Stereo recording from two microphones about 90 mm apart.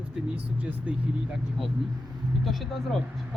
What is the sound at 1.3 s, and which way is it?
Speech, centre (ahead or behind).